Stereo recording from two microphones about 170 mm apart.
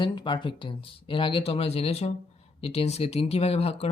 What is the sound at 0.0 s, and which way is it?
Speech, 25° left (ahead or behind).